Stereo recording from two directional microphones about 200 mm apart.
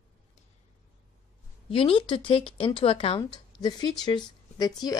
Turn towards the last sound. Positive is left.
turn(degrees=20)  # may be behind; listen again after turning